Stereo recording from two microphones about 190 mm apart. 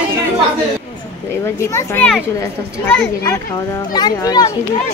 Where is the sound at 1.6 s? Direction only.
15° left (ahead or behind).